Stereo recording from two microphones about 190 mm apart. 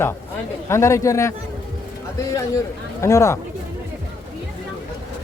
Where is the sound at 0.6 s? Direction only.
15° left (ahead or behind).